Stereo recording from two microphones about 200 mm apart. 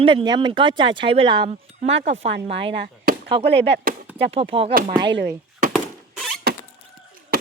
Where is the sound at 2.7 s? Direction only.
60° right (ahead or behind).